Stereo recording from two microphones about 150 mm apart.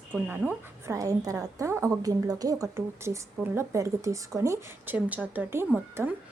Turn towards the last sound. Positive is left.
turn(degrees=-15)  # may be behind; listen again after turning